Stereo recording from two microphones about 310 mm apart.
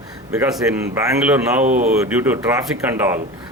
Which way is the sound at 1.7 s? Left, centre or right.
Right.